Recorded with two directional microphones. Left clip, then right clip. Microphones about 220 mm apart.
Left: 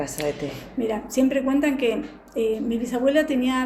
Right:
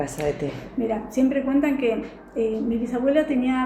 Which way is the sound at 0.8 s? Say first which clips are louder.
Even; 40° left (ahead or behind).